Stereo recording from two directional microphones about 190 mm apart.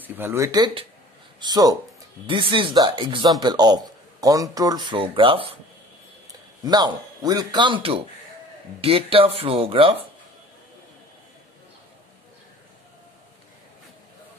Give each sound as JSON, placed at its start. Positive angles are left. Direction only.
{"t": 0.0, "sound": "a man's voice", "side_deg": -10}
{"t": 6.6, "sound": "a man's voice", "side_deg": -20}